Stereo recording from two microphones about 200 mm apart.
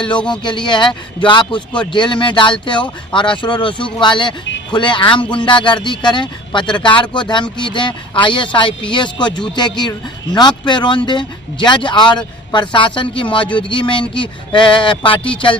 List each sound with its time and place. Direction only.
0.3 s speech: 20° left (ahead or behind)